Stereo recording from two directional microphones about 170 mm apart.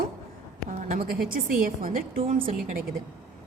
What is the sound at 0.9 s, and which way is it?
A woman's voice, 60° right (ahead or behind).